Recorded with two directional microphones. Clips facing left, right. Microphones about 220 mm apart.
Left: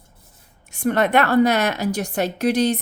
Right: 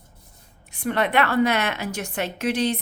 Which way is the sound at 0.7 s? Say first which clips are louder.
Left 4 dB; 45° left (ahead or behind).